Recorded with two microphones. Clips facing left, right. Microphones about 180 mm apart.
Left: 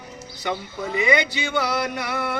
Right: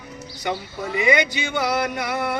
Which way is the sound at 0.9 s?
15° right (ahead or behind).